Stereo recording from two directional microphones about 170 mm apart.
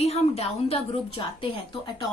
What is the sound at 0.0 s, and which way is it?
A woman's voice, 40° left (ahead or behind).